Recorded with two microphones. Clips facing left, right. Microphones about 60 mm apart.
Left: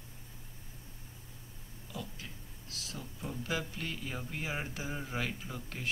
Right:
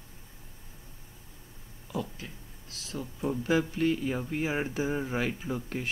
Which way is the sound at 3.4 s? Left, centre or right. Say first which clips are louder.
Right 12 dB; right.